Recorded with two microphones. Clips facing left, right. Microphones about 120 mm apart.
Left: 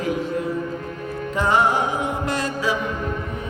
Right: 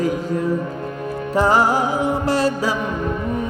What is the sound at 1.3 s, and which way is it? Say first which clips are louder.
Music: right 3 dB; 35° right (ahead or behind).